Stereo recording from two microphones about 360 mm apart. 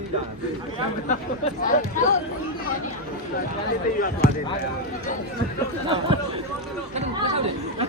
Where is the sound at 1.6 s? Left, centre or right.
Left.